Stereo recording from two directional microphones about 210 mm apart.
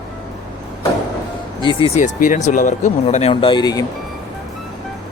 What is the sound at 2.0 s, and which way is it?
Speech, 40° left (ahead or behind).